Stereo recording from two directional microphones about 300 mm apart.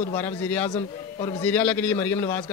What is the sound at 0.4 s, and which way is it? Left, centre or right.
A man's voice, centre.